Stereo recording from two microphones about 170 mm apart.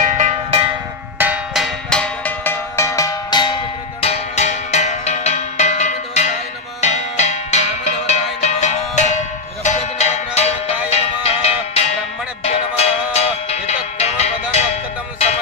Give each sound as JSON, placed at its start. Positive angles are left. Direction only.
{"t": 0.0, "sound": "cowbell", "side_deg": -45}
{"t": 1.1, "sound": "cowbell", "side_deg": -10}
{"t": 4.0, "sound": "music", "side_deg": 40}